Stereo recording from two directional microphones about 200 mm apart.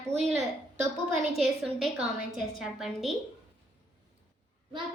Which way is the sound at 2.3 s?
Centre (ahead or behind).